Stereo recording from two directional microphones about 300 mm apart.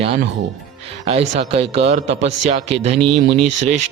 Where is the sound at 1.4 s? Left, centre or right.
Centre.